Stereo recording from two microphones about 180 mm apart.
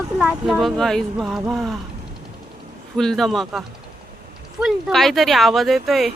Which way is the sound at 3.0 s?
Centre (ahead or behind).